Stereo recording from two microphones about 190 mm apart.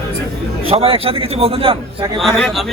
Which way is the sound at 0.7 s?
30° right (ahead or behind).